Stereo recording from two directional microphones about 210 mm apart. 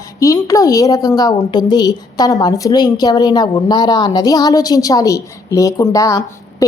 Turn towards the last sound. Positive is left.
turn(degrees=15)  # may be behind; listen again after turning